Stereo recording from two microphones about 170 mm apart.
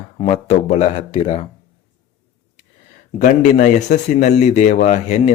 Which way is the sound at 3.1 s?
45° left (ahead or behind).